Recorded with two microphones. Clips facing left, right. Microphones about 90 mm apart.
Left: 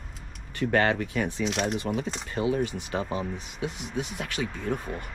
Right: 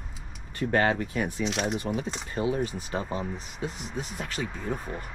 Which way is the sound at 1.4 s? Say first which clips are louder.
Left 1 dB; centre (ahead or behind).